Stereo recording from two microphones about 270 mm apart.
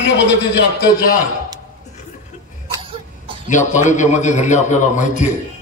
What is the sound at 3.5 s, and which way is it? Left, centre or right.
A man's voice, left.